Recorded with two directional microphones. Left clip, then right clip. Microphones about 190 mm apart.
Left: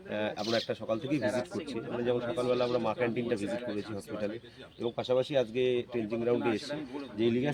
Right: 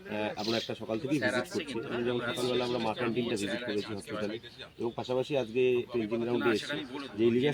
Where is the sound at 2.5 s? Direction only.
10° left (ahead or behind).